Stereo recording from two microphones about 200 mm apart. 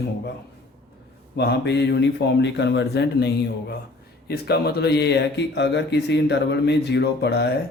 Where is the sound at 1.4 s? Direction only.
55° left (ahead or behind).